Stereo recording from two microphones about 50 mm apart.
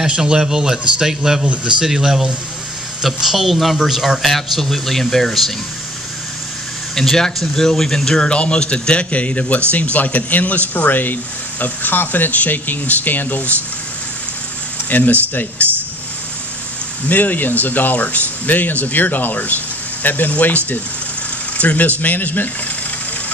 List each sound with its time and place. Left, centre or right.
0.0 s a man's voice: centre
1.4 s a man's voice: right
1.8 s a man's voice: centre
4.2 s speech: centre
7.0 s speech: centre
8.3 s a man's voice: left
14.9 s speech: left
17.1 s speech: left